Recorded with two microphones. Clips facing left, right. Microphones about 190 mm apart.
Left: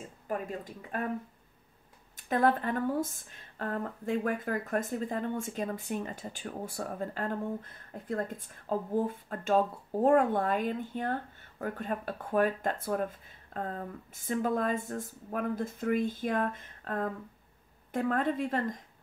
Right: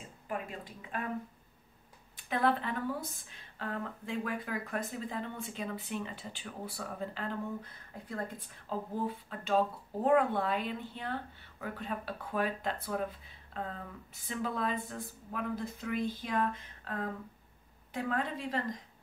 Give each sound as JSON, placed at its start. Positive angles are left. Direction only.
{"t": 0.3, "sound": "speech", "side_deg": 40}
{"t": 2.1, "sound": "speech", "side_deg": 45}